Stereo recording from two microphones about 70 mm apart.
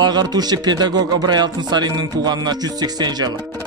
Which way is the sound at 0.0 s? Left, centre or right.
Right.